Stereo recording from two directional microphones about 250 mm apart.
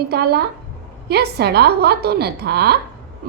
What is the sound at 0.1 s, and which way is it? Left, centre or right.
A woman's voice, right.